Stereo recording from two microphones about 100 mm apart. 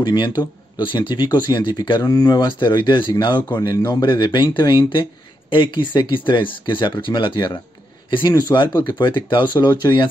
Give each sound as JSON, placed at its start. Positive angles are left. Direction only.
{"t": 0.0, "sound": "speech", "side_deg": 50}